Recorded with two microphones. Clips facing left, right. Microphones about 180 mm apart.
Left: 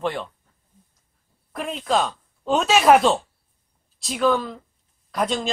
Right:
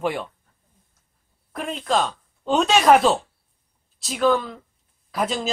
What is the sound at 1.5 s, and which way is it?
A man's voice, centre (ahead or behind).